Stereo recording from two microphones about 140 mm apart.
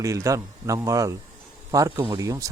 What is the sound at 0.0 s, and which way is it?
A man's voice, 20° right (ahead or behind).